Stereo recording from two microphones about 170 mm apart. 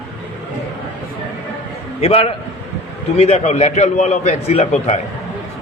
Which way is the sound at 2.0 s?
35° left (ahead or behind).